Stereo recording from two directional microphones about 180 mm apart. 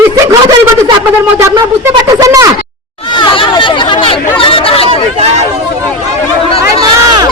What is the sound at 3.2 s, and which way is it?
Chatter, 25° left (ahead or behind).